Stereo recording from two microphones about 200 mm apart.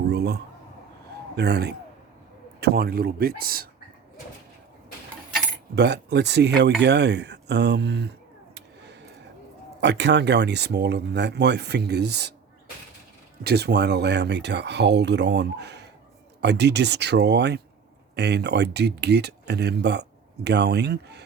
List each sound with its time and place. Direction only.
0.1 s a sound: 55° right (ahead or behind)
1.4 s speech: 55° right (ahead or behind)
5.7 s speech: 60° right (ahead or behind)
8.5 s a sound: 60° right (ahead or behind)
9.8 s speech: 60° right (ahead or behind)
13.4 s speech: 55° right (ahead or behind)